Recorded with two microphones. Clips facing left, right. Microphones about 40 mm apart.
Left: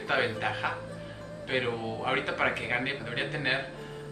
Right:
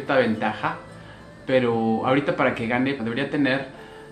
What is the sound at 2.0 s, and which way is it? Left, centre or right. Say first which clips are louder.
Speech: right 4 dB; centre.